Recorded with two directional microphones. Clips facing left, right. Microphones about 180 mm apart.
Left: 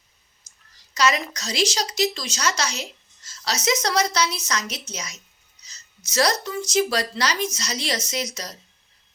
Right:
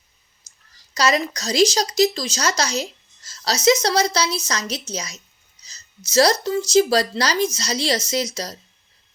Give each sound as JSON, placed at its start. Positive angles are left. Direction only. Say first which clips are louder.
{"t": 0.9, "sound": "speech", "louder": "right 2 dB", "side_deg": -35}